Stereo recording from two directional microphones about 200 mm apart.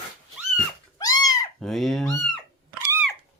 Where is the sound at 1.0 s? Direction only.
20° left (ahead or behind).